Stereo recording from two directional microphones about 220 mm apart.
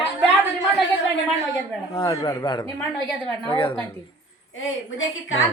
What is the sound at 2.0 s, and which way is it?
Speech, 20° left (ahead or behind).